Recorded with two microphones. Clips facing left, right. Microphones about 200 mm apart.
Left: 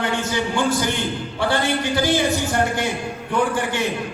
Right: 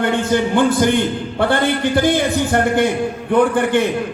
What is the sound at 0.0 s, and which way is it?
Music, 55° right (ahead or behind).